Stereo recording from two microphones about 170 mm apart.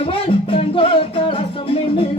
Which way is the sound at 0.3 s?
30° left (ahead or behind).